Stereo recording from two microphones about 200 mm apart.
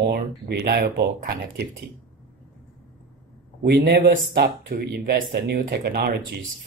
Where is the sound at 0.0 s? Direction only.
50° right (ahead or behind).